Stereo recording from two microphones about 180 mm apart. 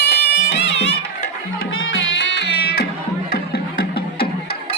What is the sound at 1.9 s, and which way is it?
Music, 90° left.